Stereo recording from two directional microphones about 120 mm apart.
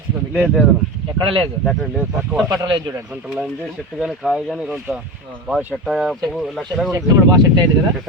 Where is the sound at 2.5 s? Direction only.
35° right (ahead or behind).